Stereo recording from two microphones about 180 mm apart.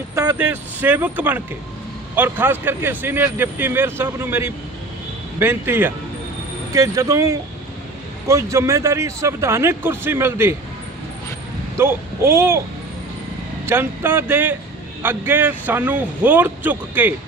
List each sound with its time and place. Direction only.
0.3 s speech: 10° right (ahead or behind)
11.8 s speech: 15° right (ahead or behind)
13.7 s speech: 10° right (ahead or behind)